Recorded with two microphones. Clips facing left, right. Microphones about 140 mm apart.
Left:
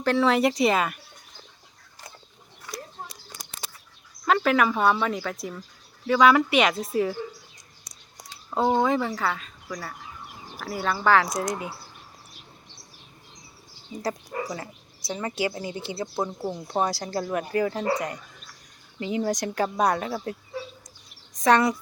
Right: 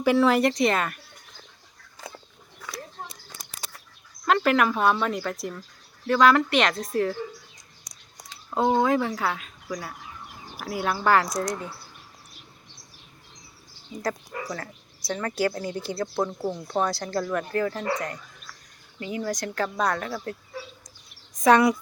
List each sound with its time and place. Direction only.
0.0 s speech: 5° right (ahead or behind)
4.3 s speech: centre (ahead or behind)
8.4 s speech: centre (ahead or behind)
14.0 s a woman's voice: 15° left (ahead or behind)
21.3 s speech: 5° right (ahead or behind)